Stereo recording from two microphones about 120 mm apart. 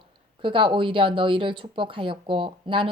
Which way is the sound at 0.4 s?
45° right (ahead or behind).